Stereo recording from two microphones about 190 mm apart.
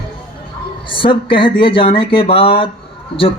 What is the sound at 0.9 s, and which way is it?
Speech, 25° left (ahead or behind).